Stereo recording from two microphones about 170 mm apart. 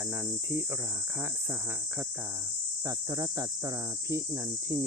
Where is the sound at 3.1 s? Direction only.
25° right (ahead or behind).